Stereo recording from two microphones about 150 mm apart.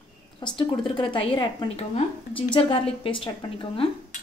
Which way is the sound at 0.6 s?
35° left (ahead or behind).